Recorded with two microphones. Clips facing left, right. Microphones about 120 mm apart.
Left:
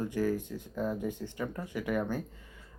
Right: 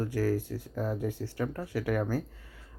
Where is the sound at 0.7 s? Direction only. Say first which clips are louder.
Even; 10° right (ahead or behind).